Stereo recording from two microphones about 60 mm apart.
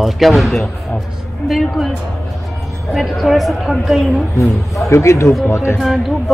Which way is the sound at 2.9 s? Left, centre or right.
Centre.